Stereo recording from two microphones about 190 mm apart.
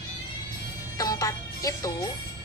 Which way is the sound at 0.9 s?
20° left (ahead or behind).